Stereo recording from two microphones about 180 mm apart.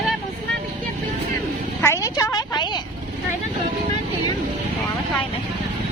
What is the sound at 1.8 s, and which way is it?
A woman's voice, 15° left (ahead or behind).